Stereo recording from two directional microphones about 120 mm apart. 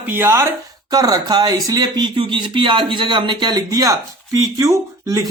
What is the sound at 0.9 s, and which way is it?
Speech, 30° right (ahead or behind).